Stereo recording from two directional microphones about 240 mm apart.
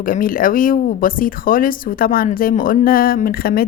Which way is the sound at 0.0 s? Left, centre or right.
Left.